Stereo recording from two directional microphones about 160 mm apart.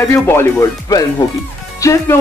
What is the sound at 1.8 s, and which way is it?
Speech, 20° left (ahead or behind).